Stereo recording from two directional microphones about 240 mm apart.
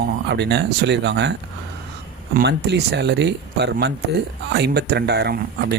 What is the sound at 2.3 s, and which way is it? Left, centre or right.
Speech, right.